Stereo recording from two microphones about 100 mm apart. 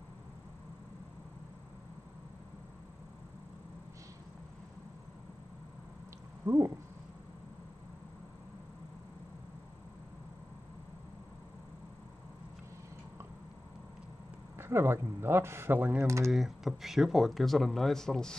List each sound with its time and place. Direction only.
6.4 s cat: 30° right (ahead or behind)
14.6 s speech: 25° right (ahead or behind)
16.3 s speech: 5° right (ahead or behind)